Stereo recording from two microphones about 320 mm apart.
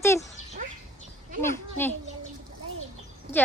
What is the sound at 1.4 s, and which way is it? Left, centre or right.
Speech, centre.